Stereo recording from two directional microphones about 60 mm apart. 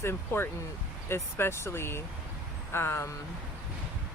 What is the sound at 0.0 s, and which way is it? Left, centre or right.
Speech, left.